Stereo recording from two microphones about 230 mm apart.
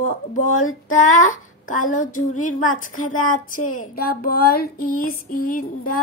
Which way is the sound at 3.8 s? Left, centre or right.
Left.